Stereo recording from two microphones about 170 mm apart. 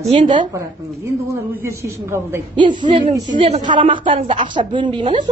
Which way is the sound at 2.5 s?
25° right (ahead or behind).